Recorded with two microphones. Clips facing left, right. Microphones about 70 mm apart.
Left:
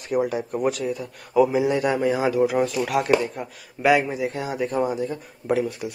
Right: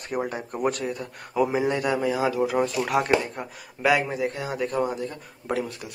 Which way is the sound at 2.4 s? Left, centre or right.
Centre.